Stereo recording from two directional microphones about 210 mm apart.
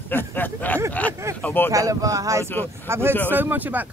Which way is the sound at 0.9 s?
5° left (ahead or behind).